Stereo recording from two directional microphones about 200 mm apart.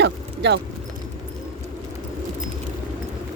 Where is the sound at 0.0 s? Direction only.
60° right (ahead or behind).